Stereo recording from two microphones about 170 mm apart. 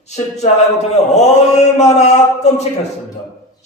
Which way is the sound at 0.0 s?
40° left (ahead or behind).